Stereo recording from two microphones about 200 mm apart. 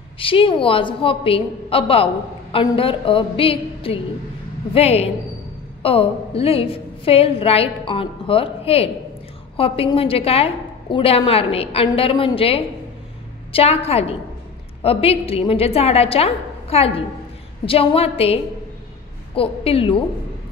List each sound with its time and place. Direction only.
0.2 s a woman's voice: 25° left (ahead or behind)